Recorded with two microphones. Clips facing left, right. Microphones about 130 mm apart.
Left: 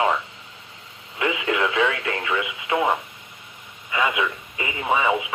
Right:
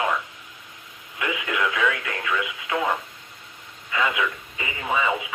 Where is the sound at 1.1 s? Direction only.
25° left (ahead or behind).